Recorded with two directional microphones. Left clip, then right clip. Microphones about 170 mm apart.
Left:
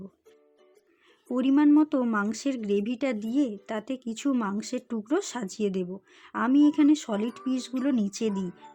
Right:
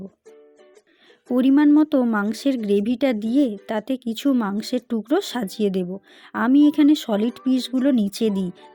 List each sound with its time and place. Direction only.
1.3 s a woman's voice: 25° right (ahead or behind)